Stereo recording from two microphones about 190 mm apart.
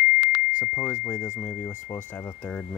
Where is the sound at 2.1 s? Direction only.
5° left (ahead or behind).